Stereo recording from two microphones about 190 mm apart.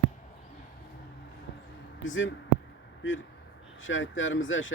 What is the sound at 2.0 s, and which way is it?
Speech, 90° left.